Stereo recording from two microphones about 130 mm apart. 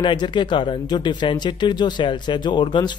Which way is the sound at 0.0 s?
35° left (ahead or behind).